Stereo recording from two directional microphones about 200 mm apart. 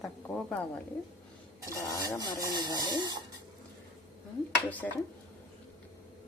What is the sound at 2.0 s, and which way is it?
Speech, 20° right (ahead or behind).